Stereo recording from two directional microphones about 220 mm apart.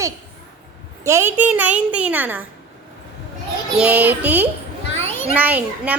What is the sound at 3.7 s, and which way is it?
A woman's voice, 5° right (ahead or behind).